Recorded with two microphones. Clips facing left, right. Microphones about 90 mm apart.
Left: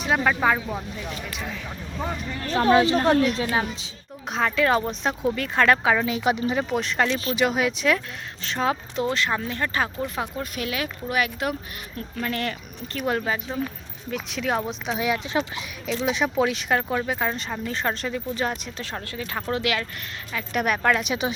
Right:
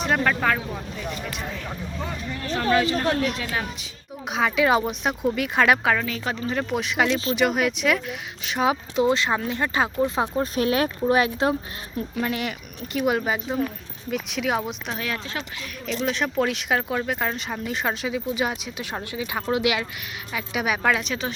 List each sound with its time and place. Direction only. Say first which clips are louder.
0.0 s speech: left 1 dB; 5° left (ahead or behind)
2.6 s speech: left 4 dB; 25° left (ahead or behind)
4.3 s speech: right 1 dB; 5° right (ahead or behind)
5.8 s speech: left 1 dB; 5° left (ahead or behind)
6.1 s speech: left 4 dB; 15° left (ahead or behind); by 8.0 s centre (ahead or behind)
8.4 s speech: right 2 dB; 15° right (ahead or behind); by 11.5 s 30° right (ahead or behind)
12.1 s speech: even; 15° right (ahead or behind)
13.2 s speech: right 2 dB; 15° right (ahead or behind)
14.1 s speech: right 1 dB; 5° right (ahead or behind)
14.9 s speech: left 9 dB; 15° left (ahead or behind)
15.9 s speech: left 1 dB; 5° left (ahead or behind); by 19.9 s 15° right (ahead or behind)
20.3 s speech: left 1 dB; 5° right (ahead or behind)
21.0 s speech: left 3 dB; 10° left (ahead or behind)